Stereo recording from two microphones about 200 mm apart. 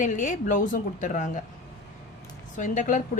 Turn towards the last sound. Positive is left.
turn(degrees=40)  # may be behind; listen again after turning